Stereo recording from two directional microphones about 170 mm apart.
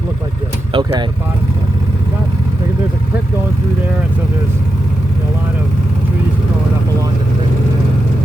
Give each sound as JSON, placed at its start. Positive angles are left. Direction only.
{"t": 0.7, "sound": "speech", "side_deg": -25}